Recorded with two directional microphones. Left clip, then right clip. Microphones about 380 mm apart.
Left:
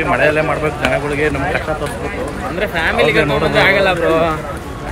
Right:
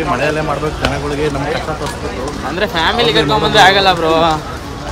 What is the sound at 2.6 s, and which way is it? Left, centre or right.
Speech, centre.